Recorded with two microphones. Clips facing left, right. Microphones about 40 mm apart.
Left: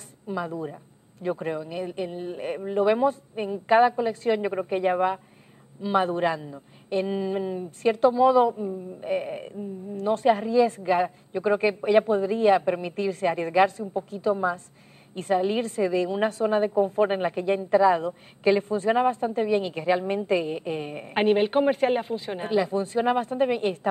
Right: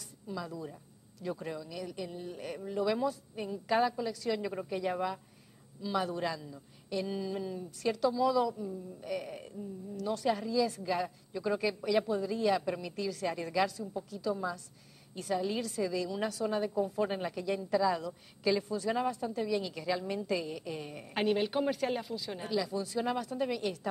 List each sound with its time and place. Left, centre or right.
0.3 s speech: left